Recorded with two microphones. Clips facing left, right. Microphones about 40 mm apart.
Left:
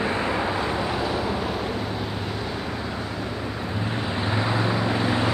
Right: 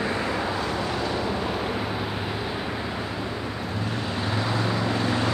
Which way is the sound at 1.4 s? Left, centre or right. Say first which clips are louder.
Even; centre.